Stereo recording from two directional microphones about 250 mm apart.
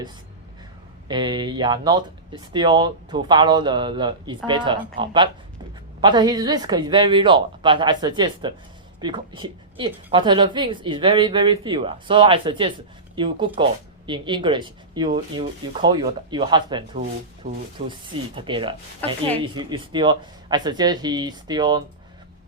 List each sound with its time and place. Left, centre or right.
1.0 s a woman's voice: centre
17.4 s speech: right
17.8 s a woman's voice: right